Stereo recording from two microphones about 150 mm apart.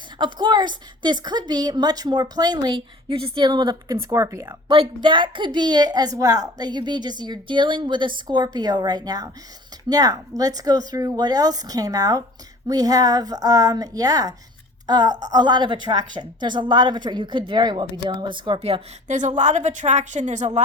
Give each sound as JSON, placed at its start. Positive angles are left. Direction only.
{"t": 0.2, "sound": "a woman's voice", "side_deg": -30}
{"t": 4.7, "sound": "a woman's voice", "side_deg": -35}